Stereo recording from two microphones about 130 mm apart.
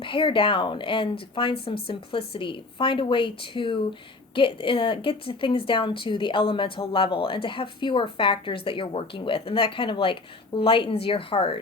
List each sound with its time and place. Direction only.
0.0 s a woman's voice: 40° left (ahead or behind)